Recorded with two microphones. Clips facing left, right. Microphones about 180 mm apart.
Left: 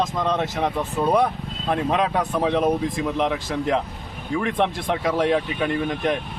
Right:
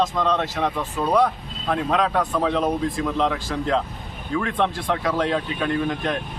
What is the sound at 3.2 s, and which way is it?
Speech, 20° left (ahead or behind).